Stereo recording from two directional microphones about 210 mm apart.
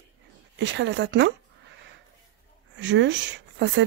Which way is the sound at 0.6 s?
60° right (ahead or behind).